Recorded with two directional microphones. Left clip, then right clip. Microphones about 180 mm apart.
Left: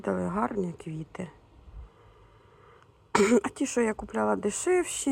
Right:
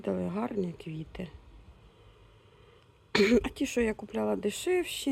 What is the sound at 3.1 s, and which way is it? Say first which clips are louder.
Speech: left 2 dB; centre (ahead or behind).